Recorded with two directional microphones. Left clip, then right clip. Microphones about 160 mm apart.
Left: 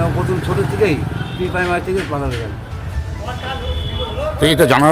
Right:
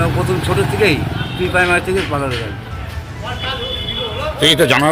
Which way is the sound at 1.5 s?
5° left (ahead or behind).